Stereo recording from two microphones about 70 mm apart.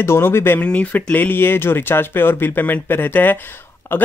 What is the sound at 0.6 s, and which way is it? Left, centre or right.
Speech, centre.